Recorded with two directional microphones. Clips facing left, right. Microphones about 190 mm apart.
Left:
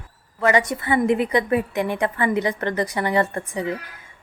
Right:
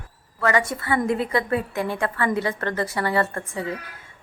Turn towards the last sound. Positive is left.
turn(degrees=20)  # may be behind; listen again after turning